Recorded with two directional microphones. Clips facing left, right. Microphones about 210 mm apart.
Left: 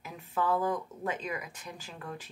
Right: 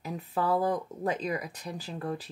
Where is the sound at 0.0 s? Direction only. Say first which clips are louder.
Right 2 dB; 35° right (ahead or behind).